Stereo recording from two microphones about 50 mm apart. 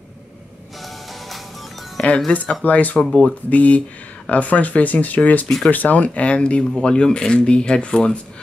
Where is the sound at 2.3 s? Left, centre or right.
Left.